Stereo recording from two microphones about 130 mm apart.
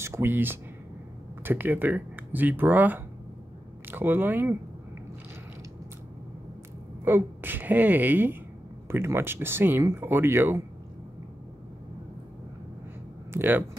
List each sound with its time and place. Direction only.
0.0 s speech: 20° right (ahead or behind)
7.1 s speech: 15° right (ahead or behind)
13.3 s speech: 15° right (ahead or behind)